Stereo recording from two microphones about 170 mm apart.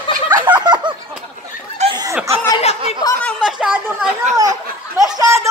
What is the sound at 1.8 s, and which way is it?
Snicker, 40° right (ahead or behind).